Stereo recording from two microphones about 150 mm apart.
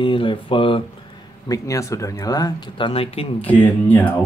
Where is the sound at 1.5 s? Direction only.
20° left (ahead or behind); by 3.4 s 40° left (ahead or behind).